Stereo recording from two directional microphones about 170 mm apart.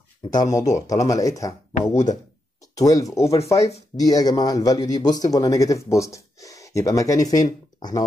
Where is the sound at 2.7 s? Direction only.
20° left (ahead or behind).